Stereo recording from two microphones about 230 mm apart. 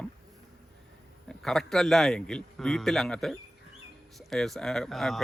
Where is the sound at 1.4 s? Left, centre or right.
Centre.